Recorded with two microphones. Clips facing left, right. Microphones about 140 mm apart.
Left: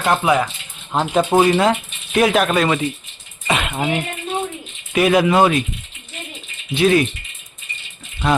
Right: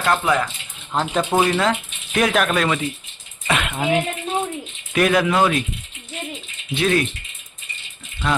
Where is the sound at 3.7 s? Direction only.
10° left (ahead or behind).